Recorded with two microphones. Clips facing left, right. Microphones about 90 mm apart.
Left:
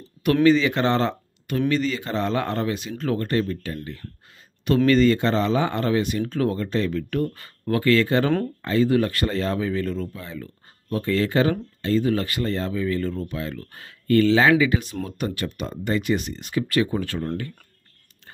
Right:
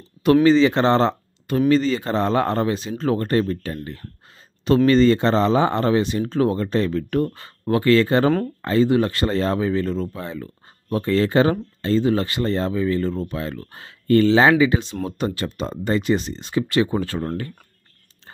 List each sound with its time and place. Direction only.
0.2 s speech: 30° right (ahead or behind)